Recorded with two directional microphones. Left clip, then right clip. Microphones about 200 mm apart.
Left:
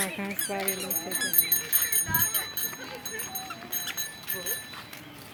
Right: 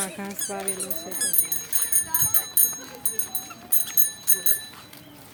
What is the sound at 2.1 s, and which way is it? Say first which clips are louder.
Clip-clop: even; 40° right (ahead or behind).